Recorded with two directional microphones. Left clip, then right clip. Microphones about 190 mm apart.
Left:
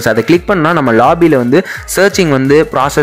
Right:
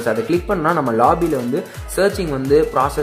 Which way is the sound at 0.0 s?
30° left (ahead or behind).